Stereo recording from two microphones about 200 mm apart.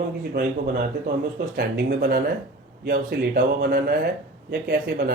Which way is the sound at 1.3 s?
50° right (ahead or behind).